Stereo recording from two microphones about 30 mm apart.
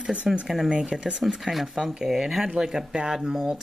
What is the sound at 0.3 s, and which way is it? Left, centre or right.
Speech, centre.